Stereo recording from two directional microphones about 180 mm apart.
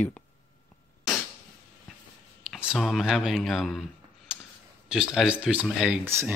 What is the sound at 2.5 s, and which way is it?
Speech, 5° right (ahead or behind).